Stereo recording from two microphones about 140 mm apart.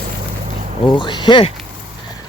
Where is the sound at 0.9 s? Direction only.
35° left (ahead or behind).